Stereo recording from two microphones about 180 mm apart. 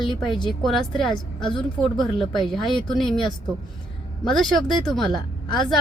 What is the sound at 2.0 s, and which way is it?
Speech, centre (ahead or behind).